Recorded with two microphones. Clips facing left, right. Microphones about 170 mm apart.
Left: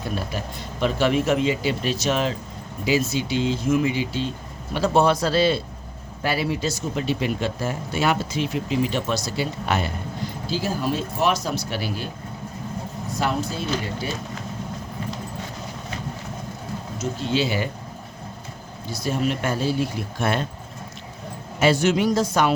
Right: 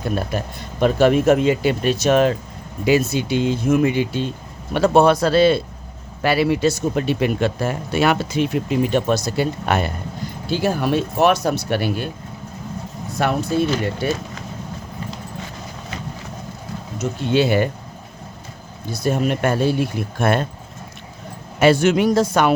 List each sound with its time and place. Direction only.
0.3 s speech: 50° right (ahead or behind)
6.2 s speech: 70° right (ahead or behind)
13.1 s speech: 60° right (ahead or behind)
17.0 s speech: 60° right (ahead or behind)
19.0 s speech: 55° right (ahead or behind)
21.6 s speech: 55° right (ahead or behind)